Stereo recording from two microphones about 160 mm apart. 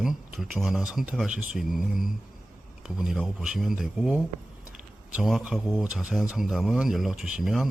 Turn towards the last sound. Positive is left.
turn(degrees=0)  # may be behind; listen again after turning